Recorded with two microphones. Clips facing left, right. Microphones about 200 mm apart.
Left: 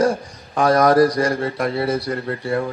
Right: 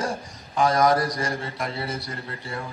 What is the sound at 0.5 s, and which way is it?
A man's voice, 60° left (ahead or behind).